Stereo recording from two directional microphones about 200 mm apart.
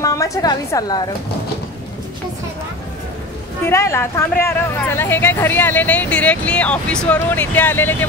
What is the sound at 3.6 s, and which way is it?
Speech, 15° left (ahead or behind).